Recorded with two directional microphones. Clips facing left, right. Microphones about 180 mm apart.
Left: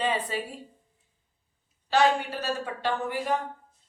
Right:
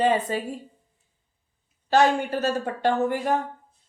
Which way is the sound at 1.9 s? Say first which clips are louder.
Right 3 dB; 45° right (ahead or behind).